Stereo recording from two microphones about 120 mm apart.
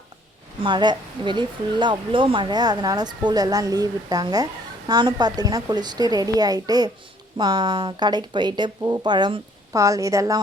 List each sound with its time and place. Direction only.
0.6 s a woman's voice: 40° right (ahead or behind)